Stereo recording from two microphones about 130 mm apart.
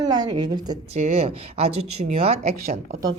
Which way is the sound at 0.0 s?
30° right (ahead or behind).